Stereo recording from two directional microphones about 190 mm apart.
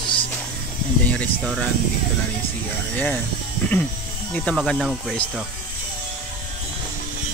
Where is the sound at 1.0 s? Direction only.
5° left (ahead or behind).